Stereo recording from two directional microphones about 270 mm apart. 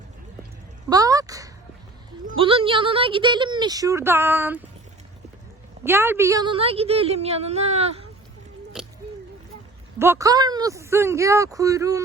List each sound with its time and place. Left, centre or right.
0.9 s a sound: centre
2.2 s speech: centre
5.8 s a woman's voice: centre
10.0 s speech: centre